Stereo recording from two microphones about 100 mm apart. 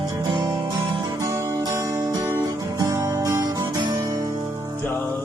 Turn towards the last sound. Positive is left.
turn(degrees=-35)  # may be behind; listen again after turning